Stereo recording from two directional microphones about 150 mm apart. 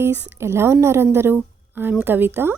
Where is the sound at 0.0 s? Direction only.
15° right (ahead or behind).